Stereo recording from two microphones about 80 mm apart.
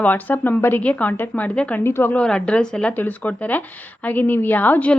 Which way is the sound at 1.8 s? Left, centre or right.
Left.